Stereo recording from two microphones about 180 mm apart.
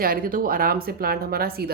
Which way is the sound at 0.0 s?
55° right (ahead or behind).